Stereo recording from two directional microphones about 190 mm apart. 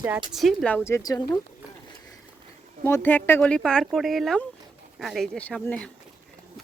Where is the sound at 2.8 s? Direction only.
10° left (ahead or behind).